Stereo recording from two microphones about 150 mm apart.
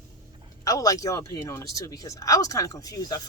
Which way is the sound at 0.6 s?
25° left (ahead or behind).